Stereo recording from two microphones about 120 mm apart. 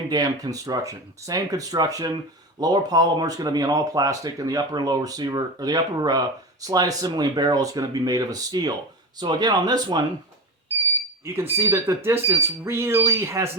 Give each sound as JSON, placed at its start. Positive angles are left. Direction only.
{"t": 0.1, "sound": "speech", "side_deg": -35}
{"t": 11.3, "sound": "speech", "side_deg": -20}